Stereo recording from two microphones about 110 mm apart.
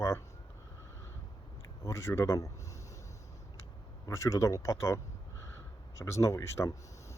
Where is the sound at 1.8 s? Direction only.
25° left (ahead or behind).